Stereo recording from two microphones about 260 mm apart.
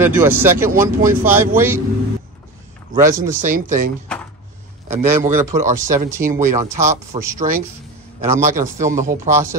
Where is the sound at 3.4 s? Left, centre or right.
Right.